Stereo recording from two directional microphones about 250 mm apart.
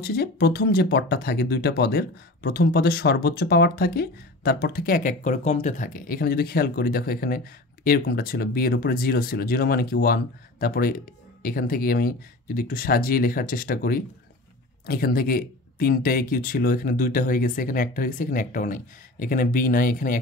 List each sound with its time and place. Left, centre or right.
0.0 s speech: left